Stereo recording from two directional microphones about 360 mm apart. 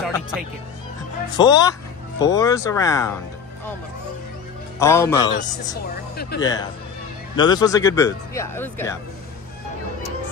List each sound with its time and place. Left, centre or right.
0.0 s music: centre
1.3 s speech: centre
4.7 s speech: centre
6.3 s speech: left
7.3 s speech: centre